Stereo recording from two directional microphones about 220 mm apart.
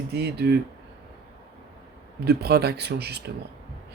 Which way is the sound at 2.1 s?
45° right (ahead or behind).